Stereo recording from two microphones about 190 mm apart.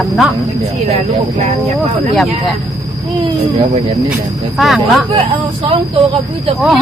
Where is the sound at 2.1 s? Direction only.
Centre (ahead or behind).